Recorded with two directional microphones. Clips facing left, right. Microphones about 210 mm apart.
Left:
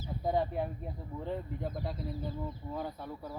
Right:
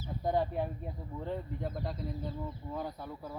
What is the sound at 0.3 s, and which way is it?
Speech, centre (ahead or behind).